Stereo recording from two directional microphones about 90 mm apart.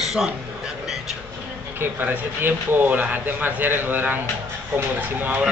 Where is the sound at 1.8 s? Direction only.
25° right (ahead or behind).